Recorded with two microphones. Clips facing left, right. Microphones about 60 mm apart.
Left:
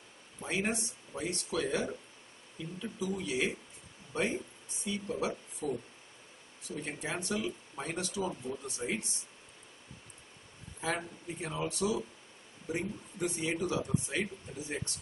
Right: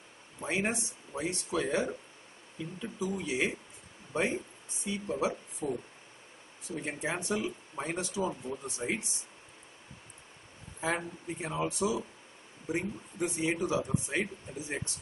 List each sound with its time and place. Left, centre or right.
0.4 s speech: centre
4.8 s speech: centre
6.7 s speech: centre
10.8 s speech: centre